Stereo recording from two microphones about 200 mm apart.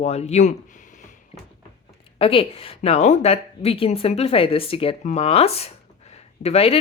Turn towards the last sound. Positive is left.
turn(degrees=30)  # may be behind; listen again after turning